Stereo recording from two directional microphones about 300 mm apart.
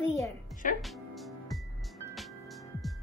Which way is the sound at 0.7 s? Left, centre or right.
Centre.